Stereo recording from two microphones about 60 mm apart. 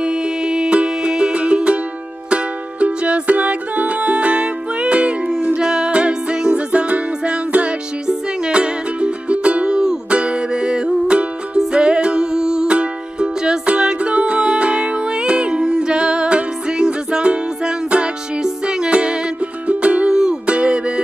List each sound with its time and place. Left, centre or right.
0.0 s music: centre